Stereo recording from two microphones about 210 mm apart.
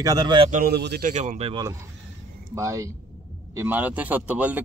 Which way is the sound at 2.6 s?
15° right (ahead or behind).